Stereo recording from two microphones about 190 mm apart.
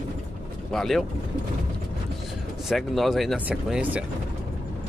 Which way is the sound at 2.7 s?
Centre (ahead or behind).